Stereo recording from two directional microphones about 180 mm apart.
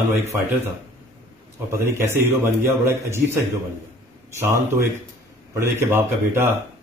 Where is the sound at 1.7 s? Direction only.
15° right (ahead or behind).